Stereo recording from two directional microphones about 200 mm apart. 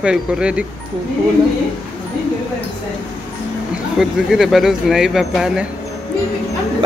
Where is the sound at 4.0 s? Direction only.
Centre (ahead or behind).